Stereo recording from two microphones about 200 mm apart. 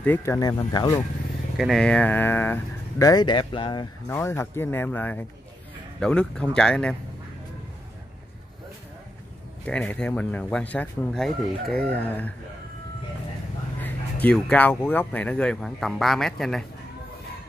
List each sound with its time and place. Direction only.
0.0 s speech: 10° left (ahead or behind)
1.6 s speech: centre (ahead or behind); by 3.8 s 25° left (ahead or behind)
4.1 s speech: 10° left (ahead or behind)
9.7 s speech: 5° left (ahead or behind)
13.7 s speech: 10° left (ahead or behind)